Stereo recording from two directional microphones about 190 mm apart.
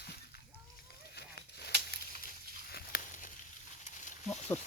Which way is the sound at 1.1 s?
60° left (ahead or behind).